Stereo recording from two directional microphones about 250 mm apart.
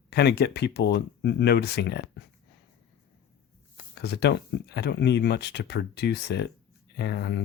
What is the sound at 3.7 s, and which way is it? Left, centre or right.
Speech, left.